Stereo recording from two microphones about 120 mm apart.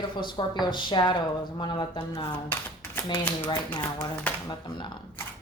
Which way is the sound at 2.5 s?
15° left (ahead or behind).